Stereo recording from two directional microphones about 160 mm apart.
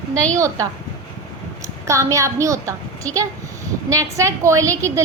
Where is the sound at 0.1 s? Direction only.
5° left (ahead or behind).